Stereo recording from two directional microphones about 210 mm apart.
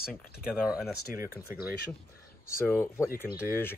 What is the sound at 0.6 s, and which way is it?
Speech, centre (ahead or behind).